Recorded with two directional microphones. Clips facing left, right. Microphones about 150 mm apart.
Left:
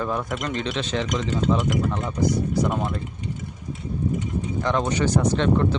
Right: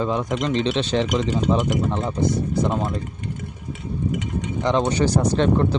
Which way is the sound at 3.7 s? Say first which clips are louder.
Right 1 dB; 80° right.